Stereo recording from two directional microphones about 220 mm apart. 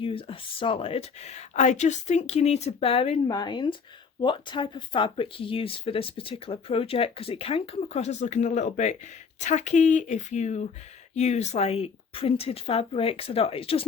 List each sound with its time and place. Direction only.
0.0 s speech: 25° left (ahead or behind)